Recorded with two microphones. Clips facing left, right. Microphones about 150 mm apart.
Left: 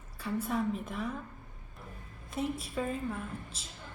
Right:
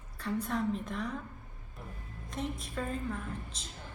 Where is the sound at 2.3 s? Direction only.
5° left (ahead or behind).